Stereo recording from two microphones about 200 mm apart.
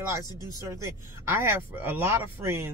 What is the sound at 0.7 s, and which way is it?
Speech, 15° right (ahead or behind).